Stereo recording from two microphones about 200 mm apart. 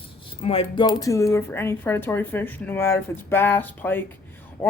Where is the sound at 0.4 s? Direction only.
30° left (ahead or behind).